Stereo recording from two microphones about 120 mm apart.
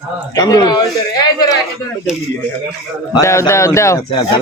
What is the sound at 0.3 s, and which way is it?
Speech, 35° left (ahead or behind).